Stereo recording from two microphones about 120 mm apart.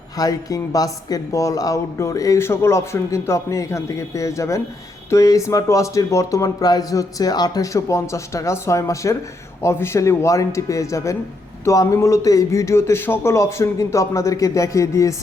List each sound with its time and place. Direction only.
0.2 s speech: 30° left (ahead or behind)